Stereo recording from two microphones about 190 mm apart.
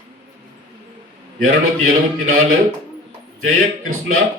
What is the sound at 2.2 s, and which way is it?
A man's voice, 90° right.